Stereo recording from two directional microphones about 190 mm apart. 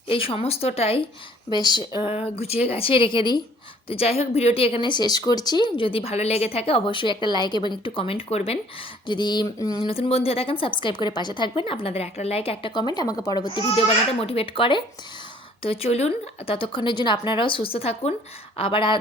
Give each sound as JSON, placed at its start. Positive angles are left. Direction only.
{"t": 0.1, "sound": "a woman's voice", "side_deg": 30}